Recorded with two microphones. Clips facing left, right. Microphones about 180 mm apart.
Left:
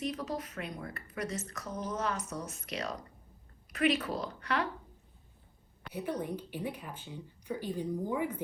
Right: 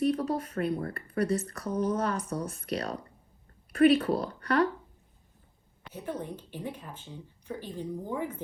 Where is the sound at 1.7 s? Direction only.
60° right (ahead or behind).